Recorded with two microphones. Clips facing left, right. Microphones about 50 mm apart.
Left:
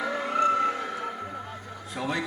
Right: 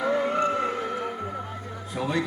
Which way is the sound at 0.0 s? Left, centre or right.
Centre.